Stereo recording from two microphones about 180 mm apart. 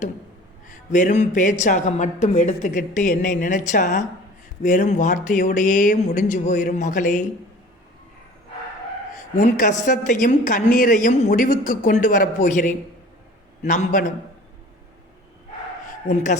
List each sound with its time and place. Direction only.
0.7 s speech: 45° left (ahead or behind)
9.4 s a man's voice: 45° left (ahead or behind)
16.0 s a man's voice: 40° left (ahead or behind)